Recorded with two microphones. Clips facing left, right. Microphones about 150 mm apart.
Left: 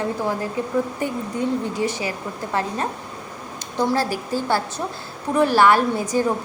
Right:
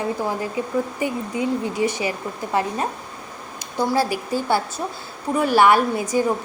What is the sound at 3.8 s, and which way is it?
A woman's voice, 10° right (ahead or behind).